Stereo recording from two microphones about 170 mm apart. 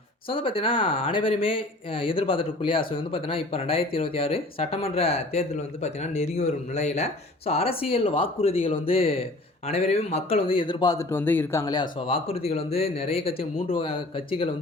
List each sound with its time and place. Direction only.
0.3 s speech: 30° left (ahead or behind); by 11.6 s 10° left (ahead or behind)
11.6 s speech: 25° left (ahead or behind)